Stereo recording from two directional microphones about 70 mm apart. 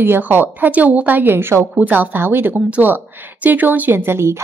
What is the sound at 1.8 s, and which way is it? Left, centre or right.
Speech, right.